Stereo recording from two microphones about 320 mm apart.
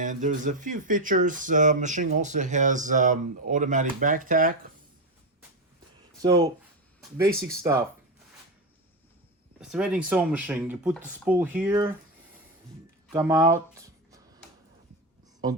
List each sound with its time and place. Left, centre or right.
0.0 s speech: right
6.2 s speech: centre
9.6 s speech: centre
13.1 s a sound: centre